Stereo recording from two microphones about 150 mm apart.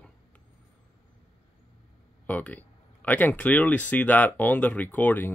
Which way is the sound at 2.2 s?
10° left (ahead or behind).